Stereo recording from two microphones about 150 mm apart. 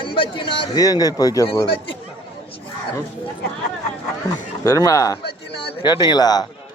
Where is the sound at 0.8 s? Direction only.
25° left (ahead or behind).